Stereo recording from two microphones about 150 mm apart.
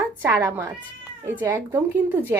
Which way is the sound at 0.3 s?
20° right (ahead or behind).